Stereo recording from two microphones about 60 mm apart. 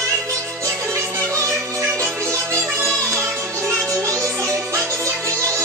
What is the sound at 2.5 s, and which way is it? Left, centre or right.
Music, right.